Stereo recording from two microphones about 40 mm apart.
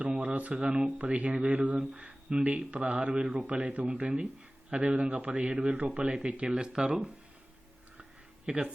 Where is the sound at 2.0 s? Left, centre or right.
Right.